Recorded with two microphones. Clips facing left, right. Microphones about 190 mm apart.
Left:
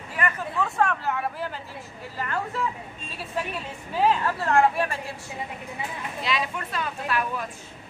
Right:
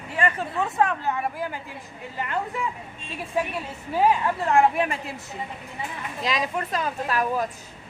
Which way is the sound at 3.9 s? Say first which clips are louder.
Right 2 dB; 10° right (ahead or behind).